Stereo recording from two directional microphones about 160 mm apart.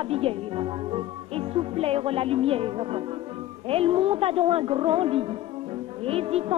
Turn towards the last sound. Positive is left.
turn(degrees=-40)  # may be behind; listen again after turning